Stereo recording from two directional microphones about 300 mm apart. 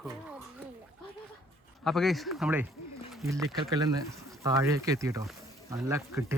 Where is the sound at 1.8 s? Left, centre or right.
Centre.